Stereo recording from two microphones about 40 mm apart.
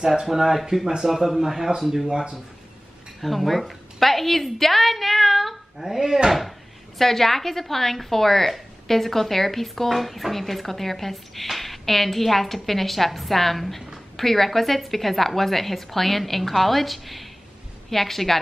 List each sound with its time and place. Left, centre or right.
0.0 s speech: centre
3.2 s a woman's voice: centre
7.0 s a woman's voice: centre